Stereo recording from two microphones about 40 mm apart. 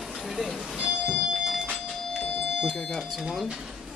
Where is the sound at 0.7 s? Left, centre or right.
Right.